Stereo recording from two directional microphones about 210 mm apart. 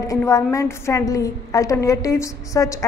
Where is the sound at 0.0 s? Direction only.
15° left (ahead or behind).